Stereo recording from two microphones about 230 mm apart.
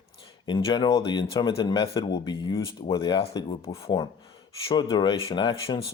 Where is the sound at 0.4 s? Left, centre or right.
Centre.